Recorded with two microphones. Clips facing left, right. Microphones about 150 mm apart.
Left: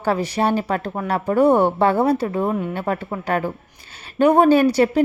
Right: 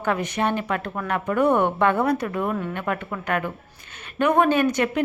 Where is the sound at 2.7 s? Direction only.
35° left (ahead or behind).